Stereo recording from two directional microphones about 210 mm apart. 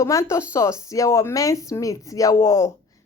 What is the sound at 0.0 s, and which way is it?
Speech, 15° left (ahead or behind).